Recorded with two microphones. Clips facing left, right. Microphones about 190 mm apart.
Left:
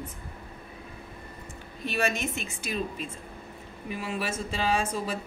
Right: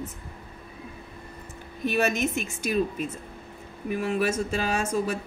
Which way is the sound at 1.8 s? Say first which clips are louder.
Right 4 dB; 45° right (ahead or behind).